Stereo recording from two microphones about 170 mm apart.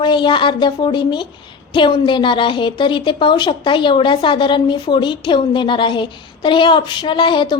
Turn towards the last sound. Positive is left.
turn(degrees=25)  # may be behind; listen again after turning